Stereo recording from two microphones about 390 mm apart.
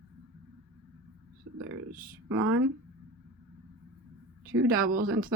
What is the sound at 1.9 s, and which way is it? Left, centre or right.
Speech, right.